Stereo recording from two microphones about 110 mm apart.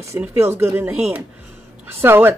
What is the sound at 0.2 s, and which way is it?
Speech, 25° right (ahead or behind).